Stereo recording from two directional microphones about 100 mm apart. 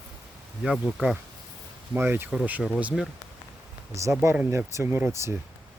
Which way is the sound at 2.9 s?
Centre (ahead or behind).